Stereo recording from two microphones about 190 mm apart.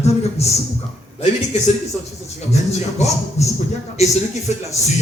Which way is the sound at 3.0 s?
35° left (ahead or behind).